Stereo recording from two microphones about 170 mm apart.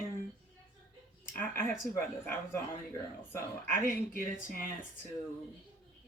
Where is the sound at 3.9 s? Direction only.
55° left (ahead or behind).